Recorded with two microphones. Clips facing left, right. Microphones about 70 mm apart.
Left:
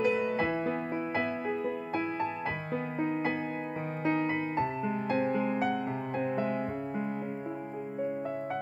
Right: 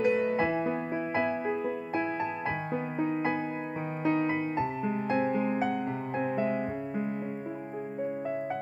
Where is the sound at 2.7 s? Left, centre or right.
Right.